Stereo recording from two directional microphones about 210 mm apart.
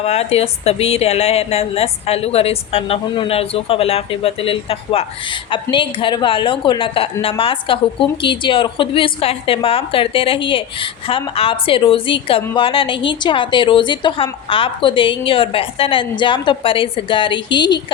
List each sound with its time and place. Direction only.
0.0 s a woman's voice: 30° left (ahead or behind)